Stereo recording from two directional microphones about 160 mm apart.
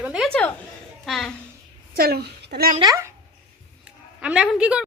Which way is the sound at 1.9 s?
75° right (ahead or behind).